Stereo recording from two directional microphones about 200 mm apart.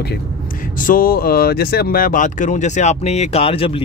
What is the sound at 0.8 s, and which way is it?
Speech, 45° left (ahead or behind).